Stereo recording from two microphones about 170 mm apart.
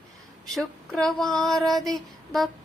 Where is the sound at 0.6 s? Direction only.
Centre (ahead or behind).